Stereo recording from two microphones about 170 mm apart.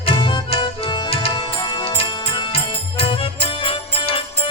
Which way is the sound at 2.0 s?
30° left (ahead or behind).